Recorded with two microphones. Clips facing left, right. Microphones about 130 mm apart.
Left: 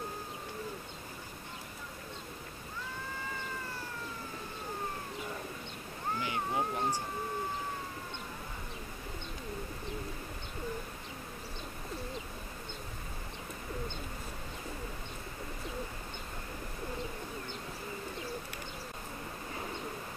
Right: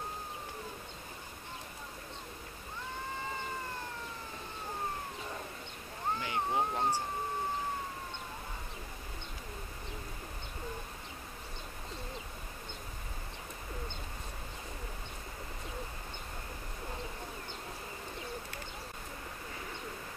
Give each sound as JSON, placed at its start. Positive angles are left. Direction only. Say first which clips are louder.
{"t": 6.1, "sound": "cat", "louder": "right 1 dB", "side_deg": -20}